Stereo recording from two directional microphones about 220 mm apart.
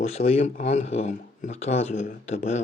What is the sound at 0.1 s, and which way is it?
Speech, 30° left (ahead or behind).